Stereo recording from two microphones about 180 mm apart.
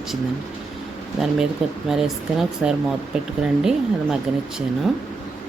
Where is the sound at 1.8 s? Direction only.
Centre (ahead or behind).